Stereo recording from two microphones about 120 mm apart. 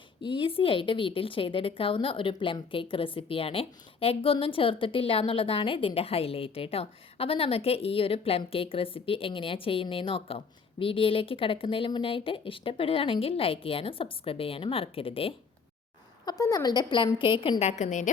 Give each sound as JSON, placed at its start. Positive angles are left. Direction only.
{"t": 0.2, "sound": "speech", "side_deg": 45}
{"t": 16.2, "sound": "a woman's voice", "side_deg": 30}
{"t": 17.6, "sound": "a woman's voice", "side_deg": 70}